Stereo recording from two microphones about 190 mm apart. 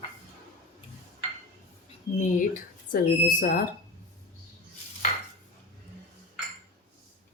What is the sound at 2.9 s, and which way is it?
Speech, 45° left (ahead or behind).